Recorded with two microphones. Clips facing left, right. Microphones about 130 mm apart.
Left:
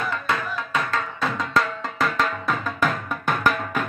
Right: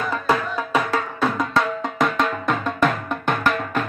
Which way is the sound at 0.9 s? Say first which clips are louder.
Right 4 dB; 5° right (ahead or behind).